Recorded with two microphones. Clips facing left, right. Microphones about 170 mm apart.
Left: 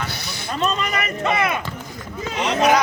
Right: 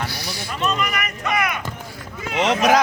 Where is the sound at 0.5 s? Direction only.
30° left (ahead or behind).